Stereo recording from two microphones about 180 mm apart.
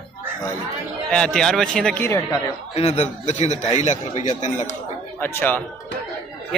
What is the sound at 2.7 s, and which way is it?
A man's voice, 35° left (ahead or behind).